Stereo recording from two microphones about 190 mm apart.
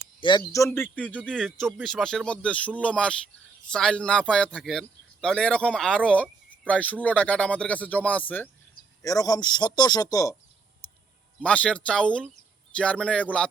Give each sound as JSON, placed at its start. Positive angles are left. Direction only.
{"t": 0.2, "sound": "a man's voice", "side_deg": 25}
{"t": 11.4, "sound": "a man's voice", "side_deg": 5}